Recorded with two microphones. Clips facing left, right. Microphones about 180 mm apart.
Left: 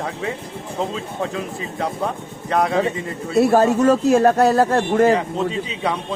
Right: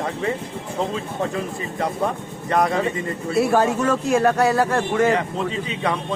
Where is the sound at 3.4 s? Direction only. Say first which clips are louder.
Left 4 dB; 35° left (ahead or behind).